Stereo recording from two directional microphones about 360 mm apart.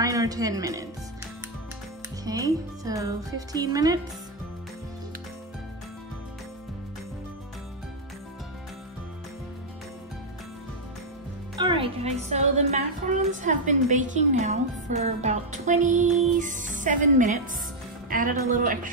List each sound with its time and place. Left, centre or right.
0.0 s speech: centre
2.2 s speech: centre
11.5 s a woman's voice: centre